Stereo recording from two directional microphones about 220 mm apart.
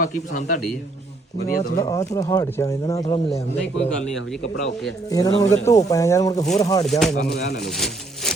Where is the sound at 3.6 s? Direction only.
5° left (ahead or behind).